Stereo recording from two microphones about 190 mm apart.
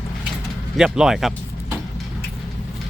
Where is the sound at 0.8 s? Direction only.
5° right (ahead or behind).